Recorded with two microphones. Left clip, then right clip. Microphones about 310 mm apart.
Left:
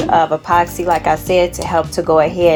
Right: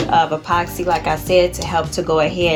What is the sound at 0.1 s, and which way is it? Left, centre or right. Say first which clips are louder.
Speech: left 3 dB; centre.